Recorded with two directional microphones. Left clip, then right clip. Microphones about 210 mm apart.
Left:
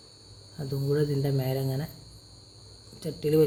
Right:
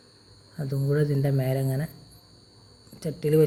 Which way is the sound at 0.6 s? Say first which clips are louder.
Right 1 dB; 5° right (ahead or behind).